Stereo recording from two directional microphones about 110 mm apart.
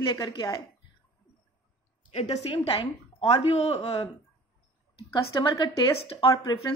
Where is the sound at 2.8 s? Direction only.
65° left (ahead or behind).